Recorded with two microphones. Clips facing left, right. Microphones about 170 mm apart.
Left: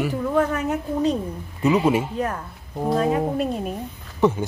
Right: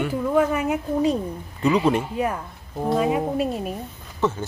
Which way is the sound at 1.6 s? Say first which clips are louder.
Left 1 dB; 5° left (ahead or behind).